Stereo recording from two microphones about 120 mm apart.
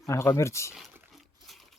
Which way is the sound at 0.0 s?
25° left (ahead or behind).